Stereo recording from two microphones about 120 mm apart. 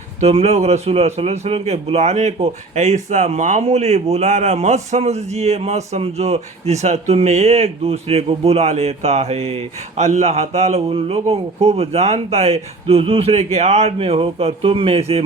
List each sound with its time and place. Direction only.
0.2 s speech: 60° right (ahead or behind)